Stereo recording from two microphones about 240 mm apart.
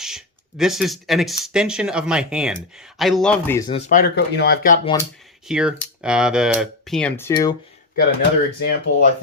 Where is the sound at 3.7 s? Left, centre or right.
Left.